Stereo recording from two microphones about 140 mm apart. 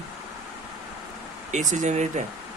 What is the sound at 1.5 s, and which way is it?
Speech, 60° right (ahead or behind).